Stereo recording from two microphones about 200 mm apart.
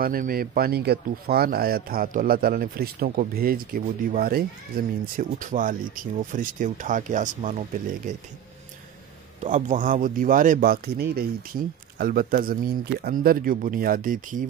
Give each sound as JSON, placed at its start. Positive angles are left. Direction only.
{"t": 0.0, "sound": "speech", "side_deg": -45}
{"t": 9.4, "sound": "speech", "side_deg": -35}